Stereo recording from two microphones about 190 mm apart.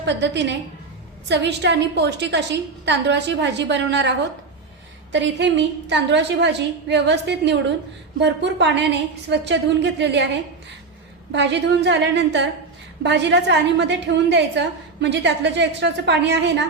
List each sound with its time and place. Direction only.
0.0 s a woman's voice: 65° right (ahead or behind)
5.1 s a woman's voice: 70° right (ahead or behind)
11.3 s a woman's voice: 70° right (ahead or behind)